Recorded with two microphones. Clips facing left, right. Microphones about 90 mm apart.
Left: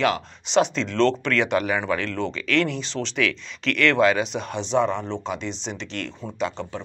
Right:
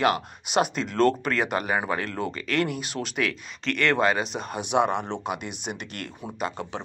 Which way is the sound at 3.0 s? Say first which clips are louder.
Left 5 dB; 20° right (ahead or behind).